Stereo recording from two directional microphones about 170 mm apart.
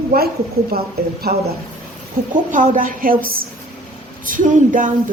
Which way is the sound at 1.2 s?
70° right (ahead or behind).